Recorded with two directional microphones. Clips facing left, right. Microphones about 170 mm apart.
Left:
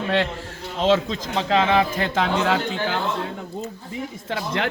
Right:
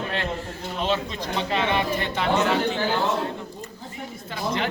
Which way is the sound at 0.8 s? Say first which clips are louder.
Left 7 dB; 90° left.